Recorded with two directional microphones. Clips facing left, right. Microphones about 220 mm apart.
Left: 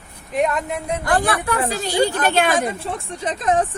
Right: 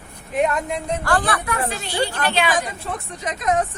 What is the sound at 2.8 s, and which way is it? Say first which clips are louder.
Speech: left 3 dB; 30° left (ahead or behind).